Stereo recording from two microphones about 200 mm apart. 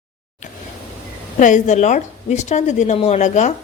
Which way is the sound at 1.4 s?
40° left (ahead or behind).